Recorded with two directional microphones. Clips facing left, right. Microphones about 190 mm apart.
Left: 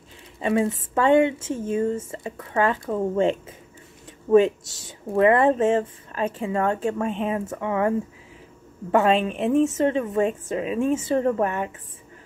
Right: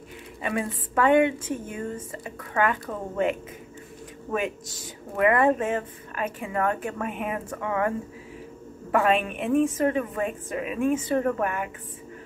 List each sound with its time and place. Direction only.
0.4 s speech: 25° left (ahead or behind)
8.9 s speech: 25° left (ahead or behind)